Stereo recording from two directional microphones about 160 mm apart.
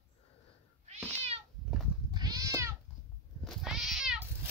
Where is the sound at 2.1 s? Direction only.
25° right (ahead or behind).